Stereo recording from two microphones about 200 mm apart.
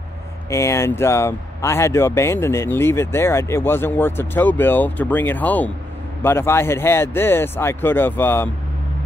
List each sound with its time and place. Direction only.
0.5 s speech: 15° left (ahead or behind)